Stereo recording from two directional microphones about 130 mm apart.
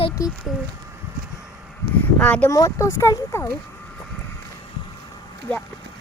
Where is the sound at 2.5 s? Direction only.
25° left (ahead or behind).